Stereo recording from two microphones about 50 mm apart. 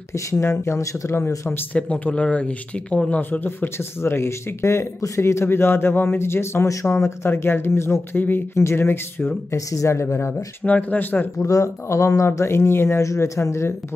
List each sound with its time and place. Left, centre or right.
0.1 s speech: left
1.7 s speech: left
3.1 s speech: left
3.7 s speech: left
7.2 s speech: left
8.2 s speech: left
8.5 s speech: left
9.5 s speech: left
10.6 s speech: left
11.4 s speech: left